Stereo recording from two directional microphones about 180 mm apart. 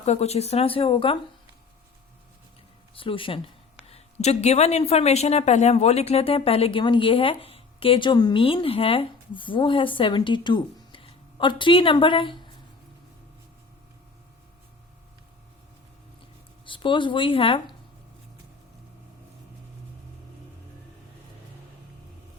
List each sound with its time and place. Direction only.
0.0 s speech: 35° left (ahead or behind)
3.0 s speech: 30° left (ahead or behind)
16.6 s speech: 30° left (ahead or behind)